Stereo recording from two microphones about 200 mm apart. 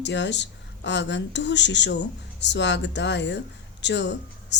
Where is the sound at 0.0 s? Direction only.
60° left (ahead or behind).